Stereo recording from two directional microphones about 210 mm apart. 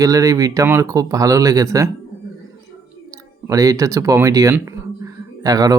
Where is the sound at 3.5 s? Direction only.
15° right (ahead or behind).